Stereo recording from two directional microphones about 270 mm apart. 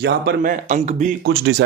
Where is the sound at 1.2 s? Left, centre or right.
Right.